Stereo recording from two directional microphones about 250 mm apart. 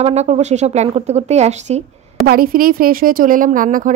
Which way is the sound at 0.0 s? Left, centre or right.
Right.